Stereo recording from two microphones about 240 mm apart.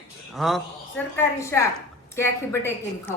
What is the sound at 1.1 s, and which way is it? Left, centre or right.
Speech, centre.